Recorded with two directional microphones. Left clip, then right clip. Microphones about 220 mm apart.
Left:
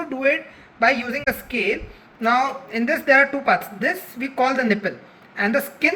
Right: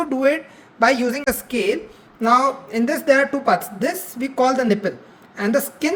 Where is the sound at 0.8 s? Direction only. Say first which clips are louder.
Right 2 dB; 40° right (ahead or behind).